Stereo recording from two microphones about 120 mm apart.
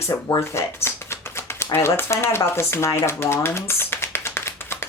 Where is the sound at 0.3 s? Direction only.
20° left (ahead or behind).